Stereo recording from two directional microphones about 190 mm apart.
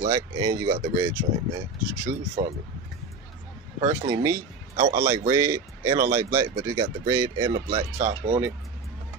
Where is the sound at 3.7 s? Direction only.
15° right (ahead or behind).